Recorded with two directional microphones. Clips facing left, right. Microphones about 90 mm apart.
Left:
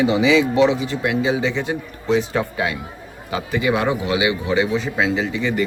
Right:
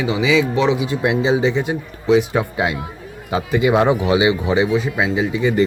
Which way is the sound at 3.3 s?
20° right (ahead or behind).